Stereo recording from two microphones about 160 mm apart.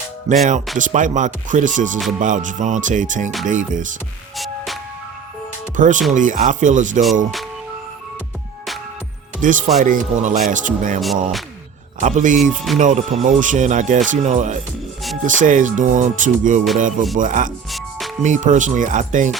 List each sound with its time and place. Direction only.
0.3 s speech: 45° right (ahead or behind)
4.4 s music: centre (ahead or behind)
5.7 s speech: 55° right (ahead or behind)
9.4 s speech: 55° right (ahead or behind)
11.0 s speech: centre (ahead or behind)
11.9 s speech: 50° right (ahead or behind)
12.4 s speech: centre (ahead or behind)
12.8 s speech: 50° right (ahead or behind)
17.7 s music: centre (ahead or behind)
18.2 s speech: 50° right (ahead or behind)